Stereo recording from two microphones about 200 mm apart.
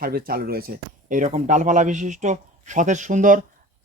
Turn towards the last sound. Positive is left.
turn(degrees=-40)  # may be behind; listen again after turning